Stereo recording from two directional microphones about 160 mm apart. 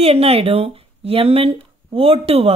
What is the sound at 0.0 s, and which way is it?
Speech, 40° right (ahead or behind).